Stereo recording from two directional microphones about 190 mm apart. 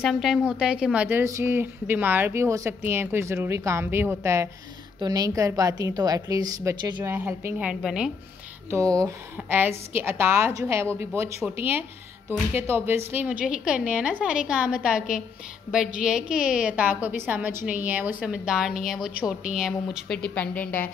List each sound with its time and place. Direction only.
0.0 s a woman's voice: centre (ahead or behind); by 7.2 s 25° right (ahead or behind)
7.2 s a woman's voice: 5° right (ahead or behind)
8.6 s a woman's voice: 15° right (ahead or behind); by 20.9 s 10° left (ahead or behind)